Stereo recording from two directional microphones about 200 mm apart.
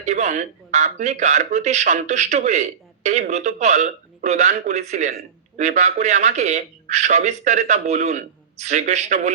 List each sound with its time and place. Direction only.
0.0 s speech: 35° right (ahead or behind)